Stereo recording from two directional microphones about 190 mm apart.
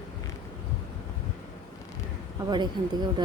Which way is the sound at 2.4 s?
25° right (ahead or behind).